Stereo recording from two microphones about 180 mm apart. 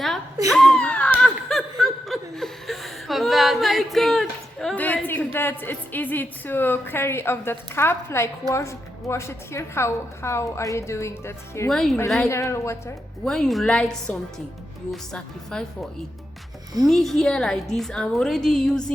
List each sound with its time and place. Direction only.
0.5 s snicker: 5° left (ahead or behind)
11.7 s a woman's voice: centre (ahead or behind)
12.3 s a woman's voice: 15° left (ahead or behind)
13.2 s a woman's voice: 5° left (ahead or behind)